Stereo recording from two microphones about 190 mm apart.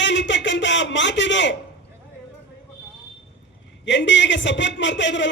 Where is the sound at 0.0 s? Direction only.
70° left (ahead or behind).